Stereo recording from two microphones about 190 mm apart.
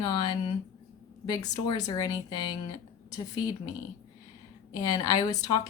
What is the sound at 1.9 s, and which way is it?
Speech, 20° left (ahead or behind).